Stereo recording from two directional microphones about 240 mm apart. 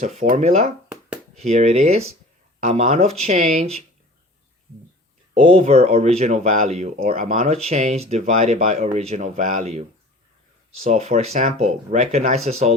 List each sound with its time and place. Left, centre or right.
0.0 s speech: right
5.3 s speech: right
10.8 s speech: right